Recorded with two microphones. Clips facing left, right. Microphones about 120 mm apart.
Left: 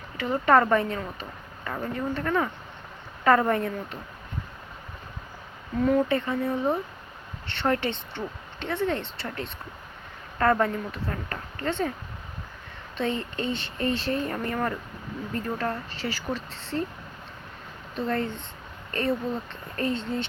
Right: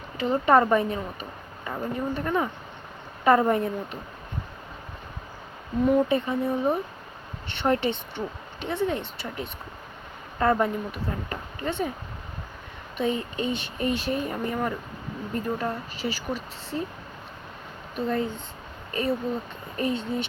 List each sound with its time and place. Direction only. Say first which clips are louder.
0.2 s speech: right 1 dB; 20° right (ahead or behind)
5.8 s speech: right 1 dB; 15° right (ahead or behind)
13.0 s speech: right 2 dB; 15° right (ahead or behind)
17.9 s speech: right 1 dB; 10° right (ahead or behind)